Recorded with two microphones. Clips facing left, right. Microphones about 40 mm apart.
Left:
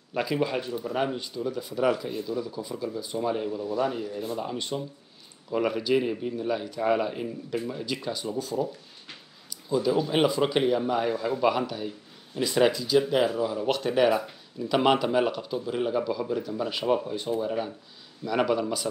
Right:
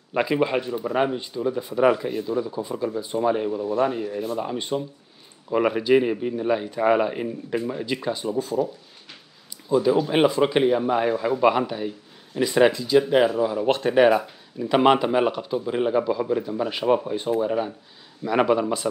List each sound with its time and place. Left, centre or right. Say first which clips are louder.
0.1 s speech: right 5 dB; right
3.6 s speech: right 5 dB; right
4.0 s speech: right 5 dB; right
4.4 s speech: right 5 dB; centre
9.7 s speech: right 5 dB; centre
12.9 s speech: right 5 dB; right
13.4 s speech: right 5 dB; centre
13.7 s speech: right 6 dB; right